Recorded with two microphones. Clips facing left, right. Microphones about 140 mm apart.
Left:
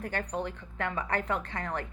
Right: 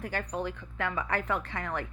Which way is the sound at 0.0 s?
45° left (ahead or behind).